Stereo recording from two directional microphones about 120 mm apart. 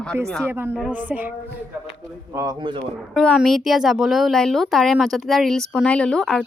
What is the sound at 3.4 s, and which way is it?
Speech, centre (ahead or behind).